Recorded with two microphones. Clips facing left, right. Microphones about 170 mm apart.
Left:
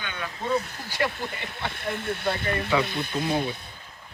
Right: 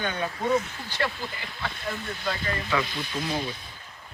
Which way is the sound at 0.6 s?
40° left (ahead or behind).